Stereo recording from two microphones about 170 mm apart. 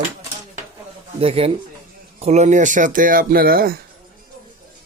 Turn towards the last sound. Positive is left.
turn(degrees=-60)  # may be behind; listen again after turning